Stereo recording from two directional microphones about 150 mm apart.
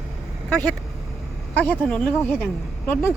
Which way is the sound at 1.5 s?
10° left (ahead or behind).